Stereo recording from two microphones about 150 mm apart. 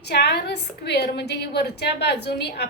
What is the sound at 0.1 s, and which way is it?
A woman's voice, 90° left.